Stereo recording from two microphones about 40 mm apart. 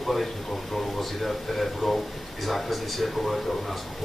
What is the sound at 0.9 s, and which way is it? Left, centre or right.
Speech, centre.